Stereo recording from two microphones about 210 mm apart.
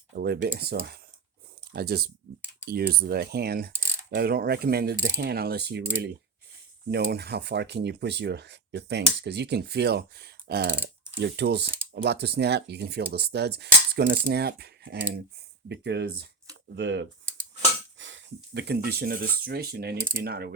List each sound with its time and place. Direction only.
0.2 s speech: 50° right (ahead or behind)